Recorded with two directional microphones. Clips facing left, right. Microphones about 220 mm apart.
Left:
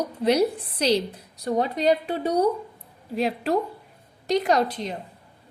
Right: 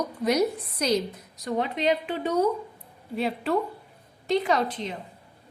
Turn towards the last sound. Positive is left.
turn(degrees=40)  # may be behind; listen again after turning